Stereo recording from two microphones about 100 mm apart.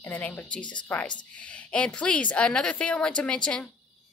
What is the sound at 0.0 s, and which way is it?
A woman's voice, 15° left (ahead or behind).